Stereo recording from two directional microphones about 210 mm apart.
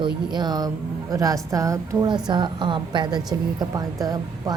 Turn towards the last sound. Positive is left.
turn(degrees=-20)  # may be behind; listen again after turning